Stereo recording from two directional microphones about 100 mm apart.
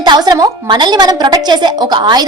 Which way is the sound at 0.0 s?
45° right (ahead or behind).